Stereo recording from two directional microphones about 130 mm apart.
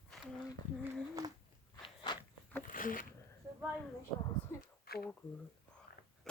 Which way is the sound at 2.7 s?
90° left.